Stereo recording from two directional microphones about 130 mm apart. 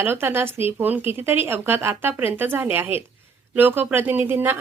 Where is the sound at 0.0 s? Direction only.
15° right (ahead or behind).